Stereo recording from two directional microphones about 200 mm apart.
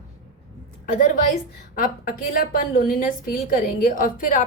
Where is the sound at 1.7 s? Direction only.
45° left (ahead or behind).